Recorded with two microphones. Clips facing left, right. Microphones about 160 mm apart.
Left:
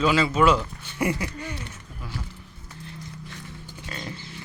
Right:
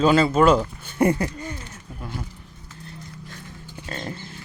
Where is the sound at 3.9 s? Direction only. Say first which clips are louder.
Right 4 dB; 45° right (ahead or behind).